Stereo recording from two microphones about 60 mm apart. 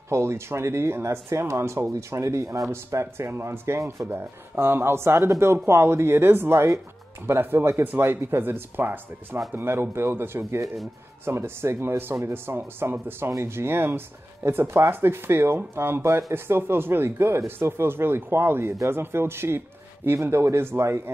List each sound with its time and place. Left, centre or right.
0.1 s speech: right
4.1 s speech: right